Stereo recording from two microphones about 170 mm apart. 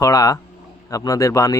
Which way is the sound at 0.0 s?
20° left (ahead or behind).